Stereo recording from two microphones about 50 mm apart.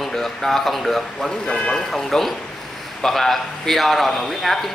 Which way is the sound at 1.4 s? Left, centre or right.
Left.